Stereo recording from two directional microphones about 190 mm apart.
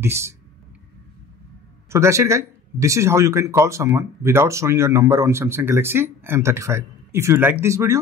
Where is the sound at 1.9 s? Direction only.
15° right (ahead or behind).